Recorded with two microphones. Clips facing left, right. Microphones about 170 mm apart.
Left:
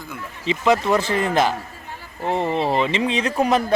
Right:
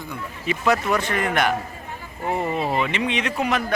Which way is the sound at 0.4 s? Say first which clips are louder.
Left 3 dB; 20° left (ahead or behind).